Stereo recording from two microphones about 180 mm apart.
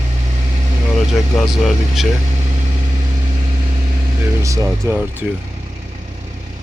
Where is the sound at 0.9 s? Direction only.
Centre (ahead or behind).